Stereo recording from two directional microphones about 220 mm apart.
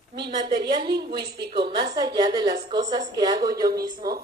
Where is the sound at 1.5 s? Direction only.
20° right (ahead or behind).